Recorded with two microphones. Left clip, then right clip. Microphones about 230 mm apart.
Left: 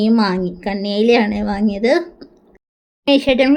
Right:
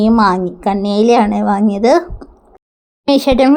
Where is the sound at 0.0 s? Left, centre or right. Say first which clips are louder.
Right 5 dB; centre.